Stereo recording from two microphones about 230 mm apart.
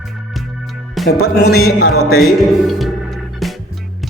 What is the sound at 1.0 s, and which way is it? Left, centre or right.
Music, centre.